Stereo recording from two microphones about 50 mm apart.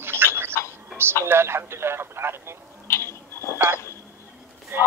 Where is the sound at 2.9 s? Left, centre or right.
Left.